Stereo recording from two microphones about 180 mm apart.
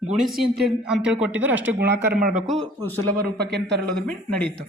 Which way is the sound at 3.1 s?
65° right (ahead or behind).